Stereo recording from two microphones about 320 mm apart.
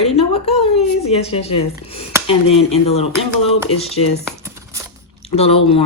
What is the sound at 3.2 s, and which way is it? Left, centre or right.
Speech, centre.